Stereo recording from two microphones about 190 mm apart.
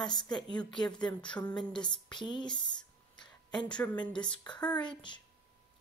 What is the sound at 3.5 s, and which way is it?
Speech, 25° left (ahead or behind).